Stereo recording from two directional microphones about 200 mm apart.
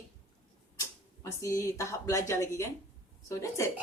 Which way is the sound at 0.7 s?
15° left (ahead or behind).